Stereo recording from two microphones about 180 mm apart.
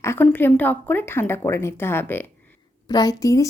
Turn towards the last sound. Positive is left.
turn(degrees=20)  # may be behind; listen again after turning